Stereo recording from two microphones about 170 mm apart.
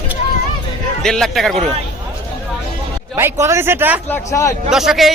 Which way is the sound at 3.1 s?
15° right (ahead or behind).